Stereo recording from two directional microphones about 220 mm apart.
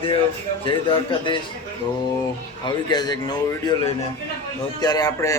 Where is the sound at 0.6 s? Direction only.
25° left (ahead or behind).